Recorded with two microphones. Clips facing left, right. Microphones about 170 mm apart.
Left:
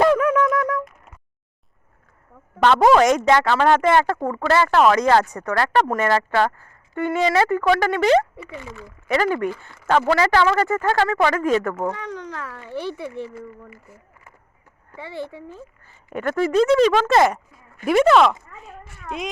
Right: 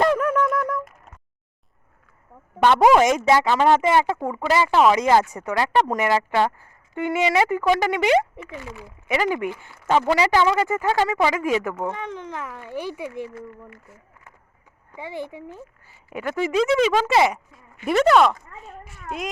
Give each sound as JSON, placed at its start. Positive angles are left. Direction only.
{"t": 0.0, "sound": "wind instrument", "side_deg": -5}
{"t": 2.6, "sound": "speech", "side_deg": -10}
{"t": 13.3, "sound": "speech", "side_deg": 5}
{"t": 14.9, "sound": "a woman's voice", "side_deg": -15}